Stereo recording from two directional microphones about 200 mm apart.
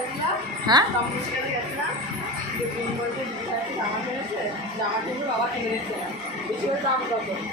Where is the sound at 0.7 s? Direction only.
20° right (ahead or behind).